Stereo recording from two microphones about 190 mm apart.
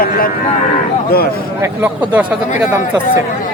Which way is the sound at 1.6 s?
10° right (ahead or behind).